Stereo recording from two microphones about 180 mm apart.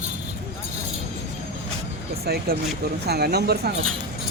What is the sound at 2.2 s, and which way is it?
Speech, 60° right (ahead or behind).